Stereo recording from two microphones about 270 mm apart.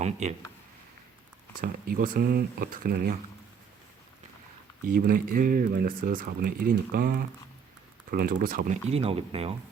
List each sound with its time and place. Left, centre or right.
0.0 s speech: right
1.6 s speech: right
4.9 s speech: right